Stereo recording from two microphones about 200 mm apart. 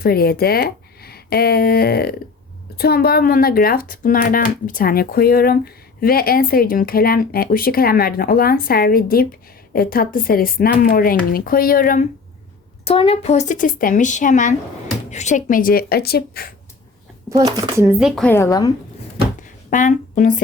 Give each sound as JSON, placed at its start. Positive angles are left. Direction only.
{"t": 0.0, "sound": "speech", "side_deg": 50}
{"t": 12.8, "sound": "speech", "side_deg": 30}
{"t": 17.2, "sound": "speech", "side_deg": -15}
{"t": 18.0, "sound": "a woman's voice", "side_deg": 5}
{"t": 19.4, "sound": "a sound", "side_deg": 40}